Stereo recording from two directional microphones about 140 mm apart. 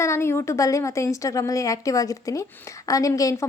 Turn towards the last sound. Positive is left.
turn(degrees=25)  # may be behind; listen again after turning